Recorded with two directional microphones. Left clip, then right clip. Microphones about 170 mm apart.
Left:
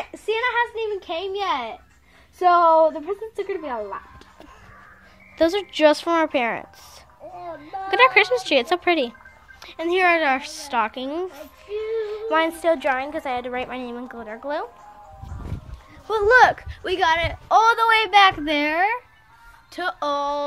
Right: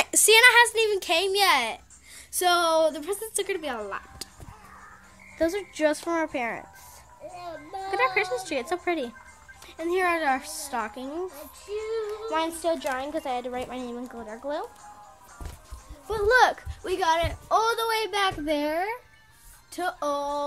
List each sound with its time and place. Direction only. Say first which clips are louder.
0.3 s a woman's voice: right 5 dB; 45° right (ahead or behind); by 4.0 s 25° right (ahead or behind)
5.4 s a woman's voice: left 7 dB; 5° left (ahead or behind)
7.9 s a woman's voice: left 9 dB; 10° left (ahead or behind)
16.1 s a woman's voice: left 6 dB; 15° left (ahead or behind)
16.5 s a woman's voice: left 5 dB; 5° right (ahead or behind)
17.5 s a woman's voice: left 9 dB; 15° left (ahead or behind)